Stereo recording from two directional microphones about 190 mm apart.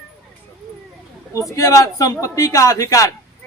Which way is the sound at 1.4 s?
15° left (ahead or behind).